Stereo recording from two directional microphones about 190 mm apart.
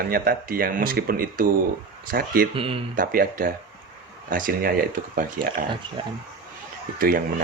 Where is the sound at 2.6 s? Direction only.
30° right (ahead or behind).